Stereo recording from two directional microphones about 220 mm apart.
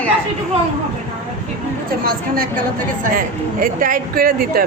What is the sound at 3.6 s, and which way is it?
Speech, 40° right (ahead or behind).